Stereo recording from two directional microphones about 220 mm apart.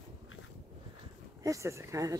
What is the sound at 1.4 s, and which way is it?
Speech, 15° right (ahead or behind).